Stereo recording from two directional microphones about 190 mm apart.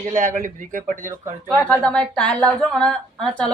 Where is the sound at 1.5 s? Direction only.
5° left (ahead or behind).